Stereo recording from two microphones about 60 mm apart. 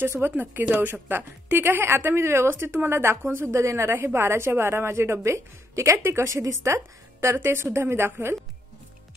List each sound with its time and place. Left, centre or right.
0.0 s a woman's voice: right
3.4 s a woman's voice: right
3.9 s a woman's voice: right